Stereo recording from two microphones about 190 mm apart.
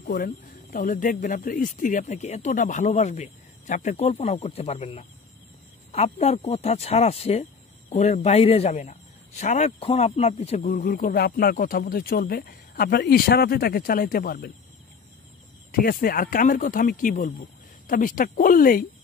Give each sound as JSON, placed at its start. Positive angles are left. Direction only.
{"t": 0.0, "sound": "speech", "side_deg": 45}
{"t": 10.6, "sound": "speech", "side_deg": 45}
{"t": 15.8, "sound": "speech", "side_deg": 50}